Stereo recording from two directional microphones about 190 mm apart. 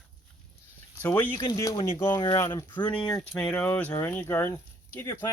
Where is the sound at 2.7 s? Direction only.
5° left (ahead or behind).